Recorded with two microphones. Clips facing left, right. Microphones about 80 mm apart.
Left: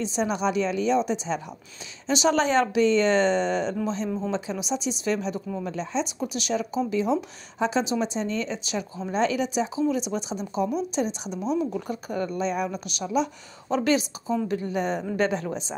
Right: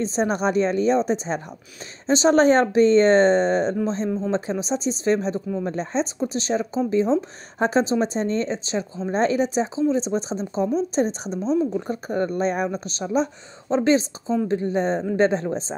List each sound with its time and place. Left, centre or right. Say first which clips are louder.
0.0 s speech: right 3 dB; right